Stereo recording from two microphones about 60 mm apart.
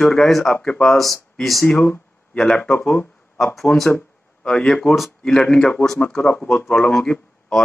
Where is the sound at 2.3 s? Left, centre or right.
Centre.